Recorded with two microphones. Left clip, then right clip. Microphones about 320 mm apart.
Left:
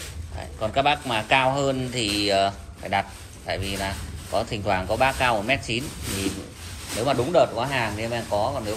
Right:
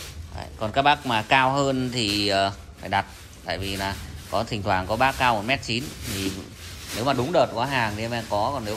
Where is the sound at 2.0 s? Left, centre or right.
Right.